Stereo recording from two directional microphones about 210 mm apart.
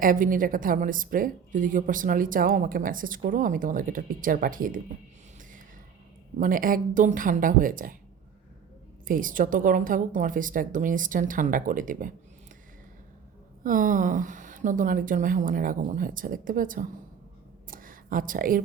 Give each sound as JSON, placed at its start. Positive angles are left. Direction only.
{"t": 0.0, "sound": "a woman's voice", "side_deg": -40}
{"t": 6.4, "sound": "a woman's voice", "side_deg": -40}
{"t": 9.0, "sound": "a woman's voice", "side_deg": -40}
{"t": 13.7, "sound": "a woman's voice", "side_deg": -40}
{"t": 17.7, "sound": "a sound", "side_deg": -40}